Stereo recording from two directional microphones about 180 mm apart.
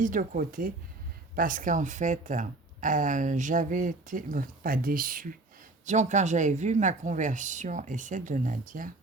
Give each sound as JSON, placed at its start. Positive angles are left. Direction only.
{"t": 0.0, "sound": "speech", "side_deg": -45}